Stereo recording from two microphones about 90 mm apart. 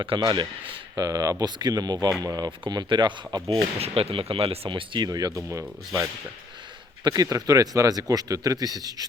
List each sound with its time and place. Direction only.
0.0 s a man's voice: 70° right (ahead or behind)
0.9 s speech: 45° right (ahead or behind)
3.5 s speech: 85° right; by 5.0 s 70° right (ahead or behind)
5.0 s speech: 45° right (ahead or behind)